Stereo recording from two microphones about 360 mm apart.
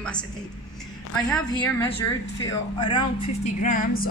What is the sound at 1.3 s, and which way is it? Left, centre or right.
A woman's voice, centre.